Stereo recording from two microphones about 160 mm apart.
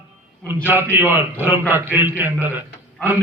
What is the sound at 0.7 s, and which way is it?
A man's voice, 15° right (ahead or behind).